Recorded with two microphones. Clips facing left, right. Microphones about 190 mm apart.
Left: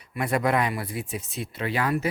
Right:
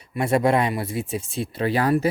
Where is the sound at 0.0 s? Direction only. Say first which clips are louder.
Right 5 dB; 25° right (ahead or behind).